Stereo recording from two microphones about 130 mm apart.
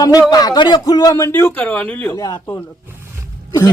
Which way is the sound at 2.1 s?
30° left (ahead or behind).